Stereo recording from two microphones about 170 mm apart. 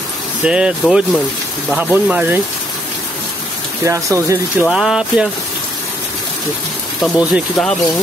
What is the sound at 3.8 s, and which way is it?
Speech, 15° right (ahead or behind).